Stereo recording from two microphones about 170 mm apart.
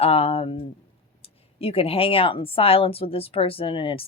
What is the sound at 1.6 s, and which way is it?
Speech, 35° left (ahead or behind).